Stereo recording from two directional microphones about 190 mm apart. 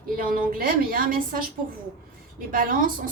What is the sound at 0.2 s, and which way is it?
A woman's voice, 50° right (ahead or behind).